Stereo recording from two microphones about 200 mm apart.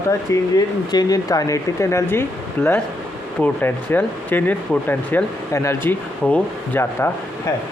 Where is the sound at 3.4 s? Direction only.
10° left (ahead or behind).